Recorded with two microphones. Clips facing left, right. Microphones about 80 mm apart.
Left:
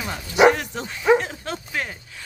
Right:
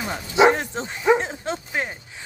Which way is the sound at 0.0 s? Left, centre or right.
Right.